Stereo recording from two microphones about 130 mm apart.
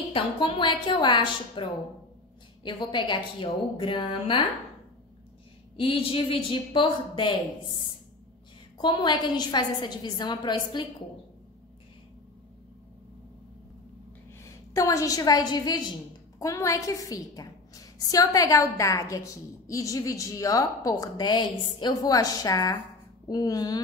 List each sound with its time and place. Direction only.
0.1 s a woman's voice: 40° left (ahead or behind)
5.8 s a woman's voice: 45° left (ahead or behind)
14.7 s a woman's voice: 25° left (ahead or behind)